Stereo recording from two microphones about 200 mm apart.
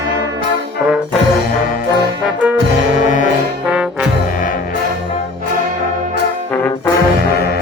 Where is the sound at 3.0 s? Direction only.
40° left (ahead or behind).